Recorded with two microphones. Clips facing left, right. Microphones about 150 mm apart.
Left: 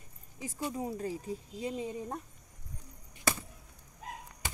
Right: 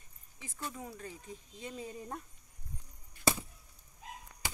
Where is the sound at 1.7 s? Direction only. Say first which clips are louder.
Left 4 dB; 25° left (ahead or behind).